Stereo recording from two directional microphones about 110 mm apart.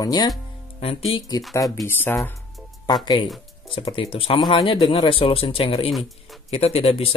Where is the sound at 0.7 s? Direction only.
60° left (ahead or behind).